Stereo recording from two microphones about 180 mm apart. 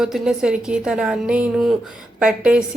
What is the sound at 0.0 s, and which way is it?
A woman's voice, 5° right (ahead or behind).